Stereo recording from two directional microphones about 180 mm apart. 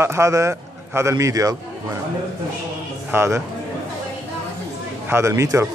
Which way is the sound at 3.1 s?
15° right (ahead or behind).